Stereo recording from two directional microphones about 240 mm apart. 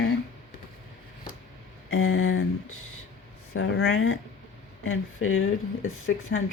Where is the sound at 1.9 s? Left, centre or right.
Left.